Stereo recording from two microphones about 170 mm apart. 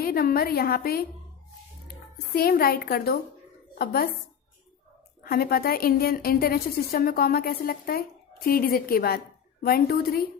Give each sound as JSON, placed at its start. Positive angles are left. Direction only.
{"t": 0.0, "sound": "a woman's voice", "side_deg": 60}
{"t": 2.3, "sound": "a woman's voice", "side_deg": 65}
{"t": 5.2, "sound": "a woman's voice", "side_deg": 60}